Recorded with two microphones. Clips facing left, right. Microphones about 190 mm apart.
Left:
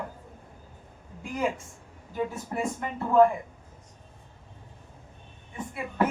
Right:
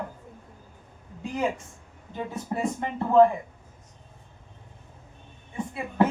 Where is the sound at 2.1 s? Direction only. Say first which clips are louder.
Left 1 dB; 25° right (ahead or behind).